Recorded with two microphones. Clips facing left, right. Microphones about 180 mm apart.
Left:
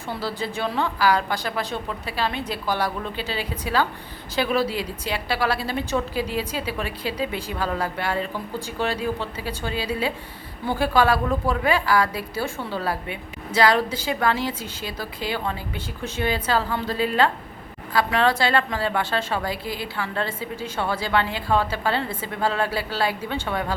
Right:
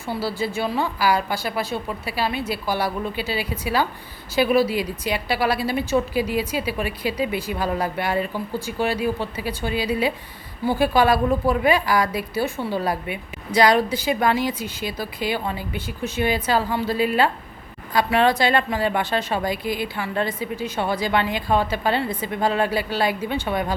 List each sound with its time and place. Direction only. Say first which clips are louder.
0.2 s a woman's voice: right 3 dB; 10° right (ahead or behind)